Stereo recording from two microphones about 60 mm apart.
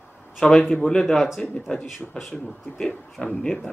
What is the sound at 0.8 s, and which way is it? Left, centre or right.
Speech, centre.